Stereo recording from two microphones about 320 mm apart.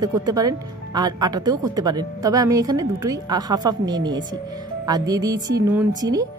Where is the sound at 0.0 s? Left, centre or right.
Centre.